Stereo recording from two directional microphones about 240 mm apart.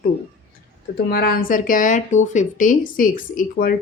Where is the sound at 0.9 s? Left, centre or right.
Left.